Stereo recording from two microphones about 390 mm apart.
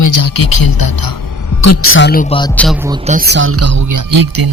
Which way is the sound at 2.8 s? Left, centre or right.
Centre.